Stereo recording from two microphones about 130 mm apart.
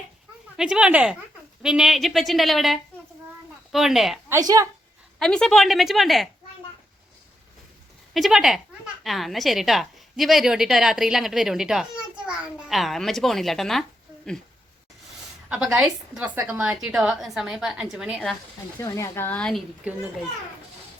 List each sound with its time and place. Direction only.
0.5 s a woman's voice: 5° right (ahead or behind)
4.3 s a woman's voice: 25° right (ahead or behind)
5.2 s a woman's voice: 5° left (ahead or behind)
8.1 s a woman's voice: centre (ahead or behind)
15.4 s a woman's voice: 10° right (ahead or behind)
18.8 s speech: 25° left (ahead or behind); by 19.6 s 5° left (ahead or behind)